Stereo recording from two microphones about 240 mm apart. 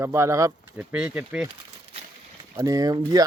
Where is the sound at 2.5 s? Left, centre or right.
Centre.